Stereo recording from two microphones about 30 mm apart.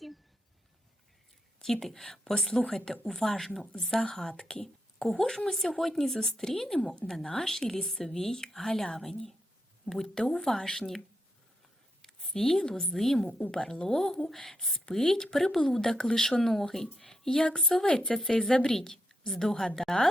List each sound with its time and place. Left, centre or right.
1.6 s speech: centre
4.3 s speech: left
4.6 s a sound: centre
5.5 s speech: centre
12.0 s a sound: centre
12.6 s speech: left
12.9 s speech: centre
13.6 s a woman's voice: left
13.8 s speech: centre
17.8 s a woman's voice: left